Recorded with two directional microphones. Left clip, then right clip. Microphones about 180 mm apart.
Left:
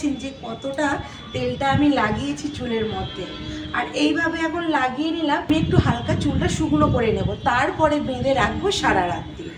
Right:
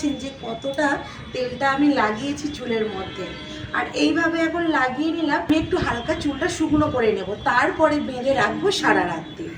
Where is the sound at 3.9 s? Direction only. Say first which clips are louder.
Right 1 dB; 15° left (ahead or behind).